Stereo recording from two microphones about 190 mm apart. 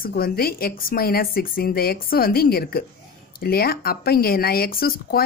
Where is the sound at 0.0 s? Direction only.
50° left (ahead or behind).